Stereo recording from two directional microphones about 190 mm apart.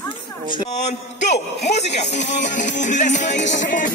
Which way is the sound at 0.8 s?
35° left (ahead or behind).